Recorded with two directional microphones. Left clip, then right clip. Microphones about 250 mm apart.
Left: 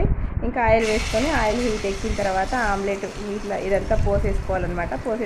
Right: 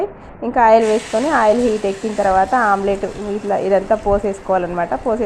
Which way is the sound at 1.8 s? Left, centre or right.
Centre.